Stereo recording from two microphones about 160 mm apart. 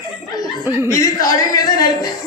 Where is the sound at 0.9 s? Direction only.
20° left (ahead or behind).